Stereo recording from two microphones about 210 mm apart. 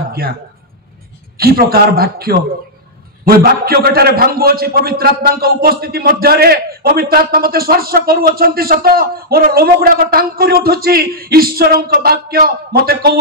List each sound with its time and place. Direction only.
1.4 s a man's voice: 45° right (ahead or behind)